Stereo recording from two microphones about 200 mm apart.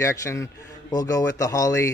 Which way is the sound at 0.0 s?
15° left (ahead or behind).